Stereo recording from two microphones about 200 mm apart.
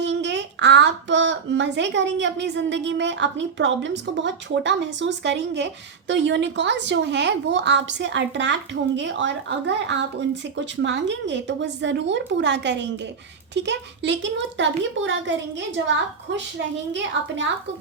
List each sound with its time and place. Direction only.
0.0 s a woman's voice: 60° right (ahead or behind)